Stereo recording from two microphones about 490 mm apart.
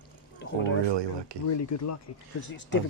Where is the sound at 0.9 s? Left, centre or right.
Right.